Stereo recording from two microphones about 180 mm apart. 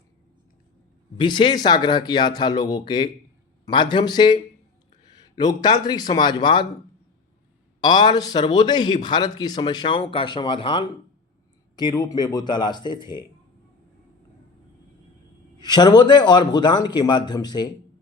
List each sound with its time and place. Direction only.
1.1 s a man's voice: 25° left (ahead or behind)
5.4 s a man's voice: 20° left (ahead or behind)
7.8 s a man's voice: 25° left (ahead or behind)
15.5 s a man's voice: 25° left (ahead or behind)